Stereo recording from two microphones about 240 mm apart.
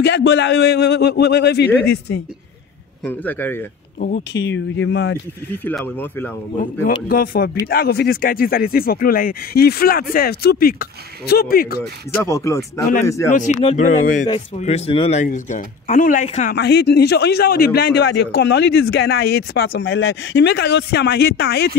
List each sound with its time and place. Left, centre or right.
0.0 s a man's voice: left
3.0 s speech: centre
4.0 s speech: left
4.5 s a man's voice: left
5.5 s speech: centre
7.1 s speech: left
11.8 s speech: centre
13.3 s speech: left